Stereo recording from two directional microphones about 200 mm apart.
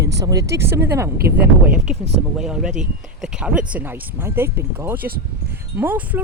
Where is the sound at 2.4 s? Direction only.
5° right (ahead or behind).